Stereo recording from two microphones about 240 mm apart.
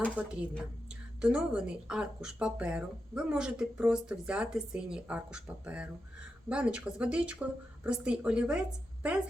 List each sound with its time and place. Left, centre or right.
0.2 s a woman's voice: centre